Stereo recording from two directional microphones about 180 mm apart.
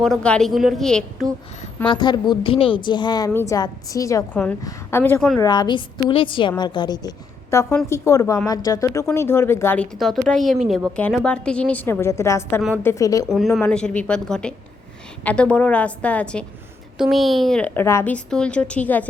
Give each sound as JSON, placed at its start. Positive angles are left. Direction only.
{"t": 0.0, "sound": "speech", "side_deg": 5}
{"t": 1.9, "sound": "a woman's voice", "side_deg": 25}
{"t": 5.4, "sound": "a woman's voice", "side_deg": 25}